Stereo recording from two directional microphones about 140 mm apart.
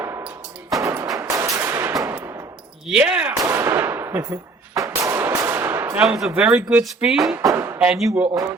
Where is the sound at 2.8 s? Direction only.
5° right (ahead or behind).